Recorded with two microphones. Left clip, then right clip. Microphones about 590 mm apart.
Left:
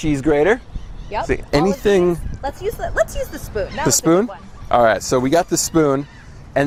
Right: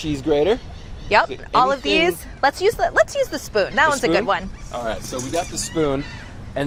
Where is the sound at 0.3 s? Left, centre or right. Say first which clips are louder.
Left 3 dB; left.